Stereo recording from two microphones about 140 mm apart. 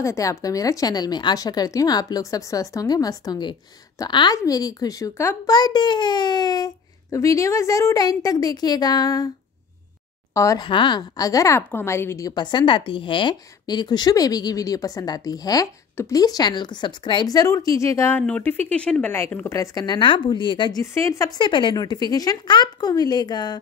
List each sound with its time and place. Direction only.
0.0 s a woman's voice: 20° left (ahead or behind)
5.5 s a woman's voice: 30° left (ahead or behind)
10.3 s a woman's voice: 25° left (ahead or behind)
20.8 s a woman's voice: 20° left (ahead or behind)
21.4 s a woman's voice: 35° left (ahead or behind)